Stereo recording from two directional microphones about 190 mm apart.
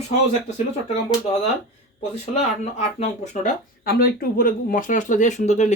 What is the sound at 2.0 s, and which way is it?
Speech, 35° left (ahead or behind).